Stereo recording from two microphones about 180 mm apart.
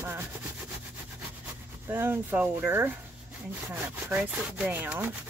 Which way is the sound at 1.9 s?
10° right (ahead or behind).